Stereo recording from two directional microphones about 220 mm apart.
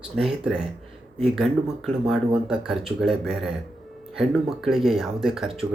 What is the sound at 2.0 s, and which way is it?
Speech, centre (ahead or behind).